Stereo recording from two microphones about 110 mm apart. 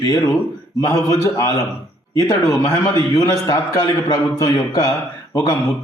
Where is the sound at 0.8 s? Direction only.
30° left (ahead or behind).